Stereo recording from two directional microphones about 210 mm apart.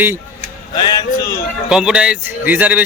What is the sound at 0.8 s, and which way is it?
Speech, 20° left (ahead or behind).